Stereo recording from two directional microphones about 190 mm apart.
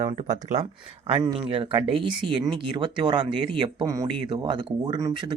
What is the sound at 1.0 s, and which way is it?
Speech, 25° right (ahead or behind).